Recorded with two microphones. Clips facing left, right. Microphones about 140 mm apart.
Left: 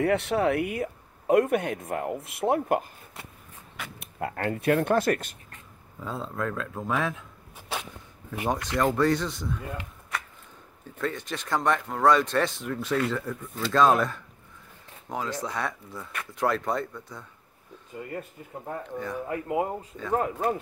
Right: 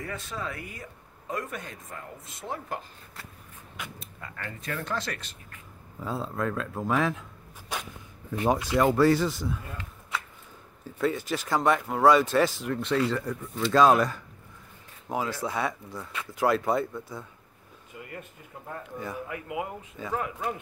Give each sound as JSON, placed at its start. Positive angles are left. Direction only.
{"t": 0.0, "sound": "speech", "side_deg": 70}
{"t": 4.0, "sound": "speech", "side_deg": 60}
{"t": 6.0, "sound": "speech", "side_deg": -5}
{"t": 8.5, "sound": "speech", "side_deg": -10}
{"t": 11.0, "sound": "speech", "side_deg": -5}
{"t": 17.9, "sound": "speech", "side_deg": 35}
{"t": 18.4, "sound": "speech", "side_deg": 25}
{"t": 19.2, "sound": "speech", "side_deg": 35}